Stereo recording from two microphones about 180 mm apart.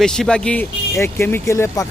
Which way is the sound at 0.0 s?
5° left (ahead or behind).